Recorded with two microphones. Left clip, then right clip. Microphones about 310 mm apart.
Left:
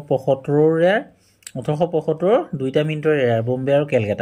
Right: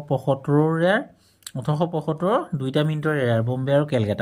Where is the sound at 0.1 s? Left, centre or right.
Right.